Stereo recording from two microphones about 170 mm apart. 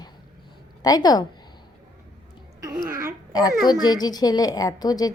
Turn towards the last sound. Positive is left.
turn(degrees=20)  # may be behind; listen again after turning